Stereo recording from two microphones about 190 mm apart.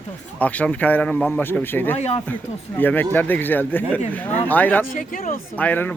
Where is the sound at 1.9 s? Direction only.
35° left (ahead or behind).